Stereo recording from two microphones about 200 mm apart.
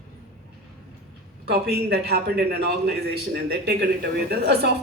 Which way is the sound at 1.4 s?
50° right (ahead or behind).